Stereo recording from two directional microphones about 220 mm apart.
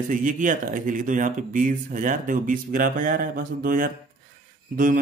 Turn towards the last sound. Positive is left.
turn(degrees=-40)  # may be behind; listen again after turning